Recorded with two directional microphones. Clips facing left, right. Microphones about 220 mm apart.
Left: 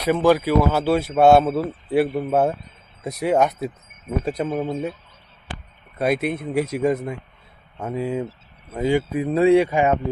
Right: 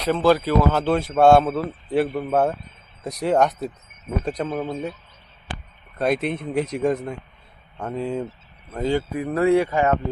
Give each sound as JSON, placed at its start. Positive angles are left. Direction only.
{"t": 0.0, "sound": "speech", "side_deg": 15}
{"t": 6.0, "sound": "speech", "side_deg": 5}